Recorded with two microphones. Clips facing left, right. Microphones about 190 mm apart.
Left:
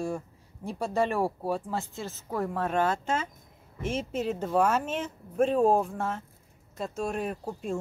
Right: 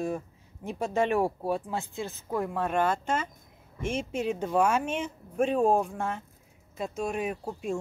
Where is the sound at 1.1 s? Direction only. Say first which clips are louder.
Right 1 dB; 15° right (ahead or behind).